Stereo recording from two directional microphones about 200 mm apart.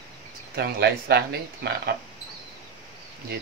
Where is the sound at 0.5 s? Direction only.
55° right (ahead or behind).